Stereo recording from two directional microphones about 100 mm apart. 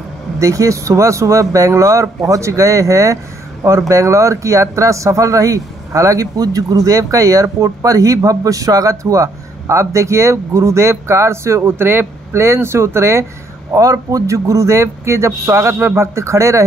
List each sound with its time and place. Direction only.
0.4 s speech: 35° right (ahead or behind)